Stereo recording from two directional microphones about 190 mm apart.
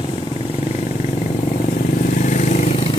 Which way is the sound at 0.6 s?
30° left (ahead or behind).